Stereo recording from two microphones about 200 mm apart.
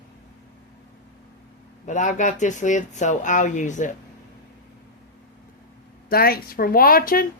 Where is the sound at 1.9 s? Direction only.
40° left (ahead or behind).